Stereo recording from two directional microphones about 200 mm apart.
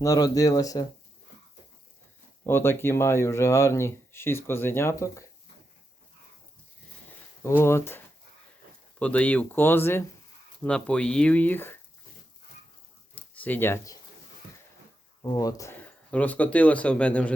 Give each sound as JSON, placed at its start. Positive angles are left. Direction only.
{"t": 0.0, "sound": "speech", "side_deg": 15}
{"t": 2.5, "sound": "speech", "side_deg": 10}
{"t": 7.4, "sound": "speech", "side_deg": 15}
{"t": 13.1, "sound": "a sound", "side_deg": 10}
{"t": 15.2, "sound": "speech", "side_deg": 15}